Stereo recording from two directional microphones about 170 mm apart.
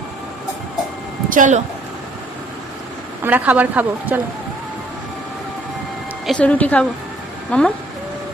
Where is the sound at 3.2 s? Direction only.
10° right (ahead or behind).